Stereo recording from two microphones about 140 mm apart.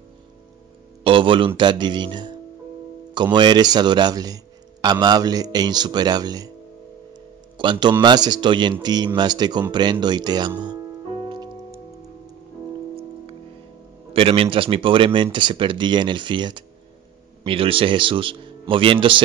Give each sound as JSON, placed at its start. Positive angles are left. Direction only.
{"t": 1.0, "sound": "a man's voice", "side_deg": -40}
{"t": 7.5, "sound": "a man's voice", "side_deg": -35}
{"t": 14.1, "sound": "a man's voice", "side_deg": -40}